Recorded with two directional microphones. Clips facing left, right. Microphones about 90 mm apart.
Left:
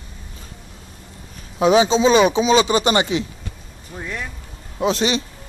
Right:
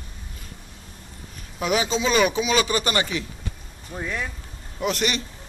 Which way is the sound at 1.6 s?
25° left (ahead or behind).